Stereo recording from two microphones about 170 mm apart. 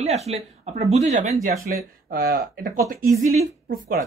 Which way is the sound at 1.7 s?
55° right (ahead or behind).